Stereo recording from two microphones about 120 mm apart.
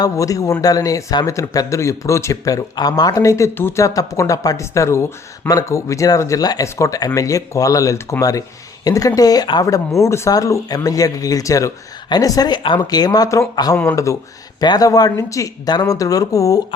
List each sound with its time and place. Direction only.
0.0 s speech: 30° left (ahead or behind)